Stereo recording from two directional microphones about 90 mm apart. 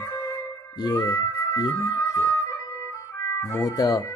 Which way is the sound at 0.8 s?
45° left (ahead or behind).